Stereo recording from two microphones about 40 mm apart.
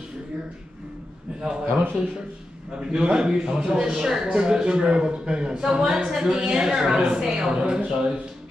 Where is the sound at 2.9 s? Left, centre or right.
Centre.